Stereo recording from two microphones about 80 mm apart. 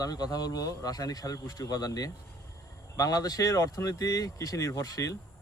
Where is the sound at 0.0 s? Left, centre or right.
Left.